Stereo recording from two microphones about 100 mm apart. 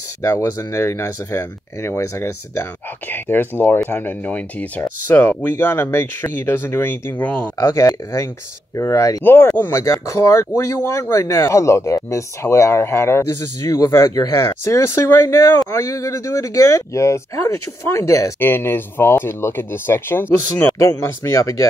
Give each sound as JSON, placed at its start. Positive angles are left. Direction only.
{"t": 0.2, "sound": "speech", "side_deg": 30}
{"t": 7.5, "sound": "speech", "side_deg": 35}
{"t": 9.2, "sound": "speech", "side_deg": 20}
{"t": 20.8, "sound": "speech", "side_deg": 30}